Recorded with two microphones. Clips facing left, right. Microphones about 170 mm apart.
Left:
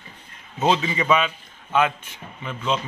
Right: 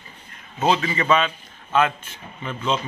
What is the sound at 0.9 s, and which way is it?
Speech, 10° left (ahead or behind).